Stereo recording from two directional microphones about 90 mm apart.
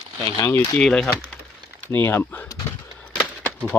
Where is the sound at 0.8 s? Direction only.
5° left (ahead or behind).